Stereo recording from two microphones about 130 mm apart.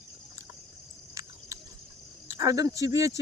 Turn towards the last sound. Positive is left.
turn(degrees=-25)  # may be behind; listen again after turning